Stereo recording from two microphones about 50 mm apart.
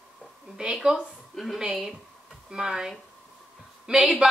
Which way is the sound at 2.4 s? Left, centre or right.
Centre.